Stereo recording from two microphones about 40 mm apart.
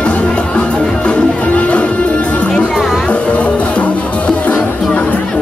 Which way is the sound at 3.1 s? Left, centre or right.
Left.